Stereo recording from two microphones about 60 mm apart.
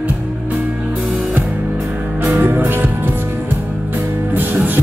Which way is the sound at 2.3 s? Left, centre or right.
Right.